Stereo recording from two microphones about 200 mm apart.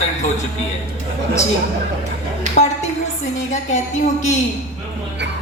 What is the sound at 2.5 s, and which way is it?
A woman's voice, 35° left (ahead or behind).